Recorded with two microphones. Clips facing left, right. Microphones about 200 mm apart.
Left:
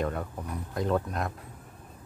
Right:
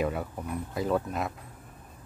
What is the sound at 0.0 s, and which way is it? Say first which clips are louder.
Speech: right 1 dB; 5° right (ahead or behind).